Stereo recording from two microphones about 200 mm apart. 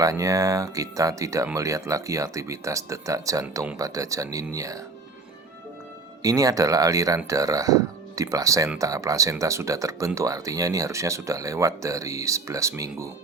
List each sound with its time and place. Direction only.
0.0 s speech: 15° right (ahead or behind)
6.2 s speech: 15° right (ahead or behind)